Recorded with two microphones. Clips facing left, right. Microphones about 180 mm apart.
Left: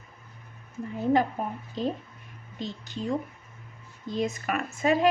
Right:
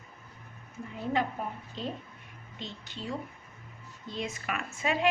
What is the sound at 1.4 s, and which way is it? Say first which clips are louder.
Speech: left 4 dB; 45° left (ahead or behind).